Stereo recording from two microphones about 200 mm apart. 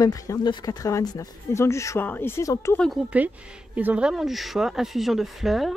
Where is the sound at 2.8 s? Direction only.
5° right (ahead or behind).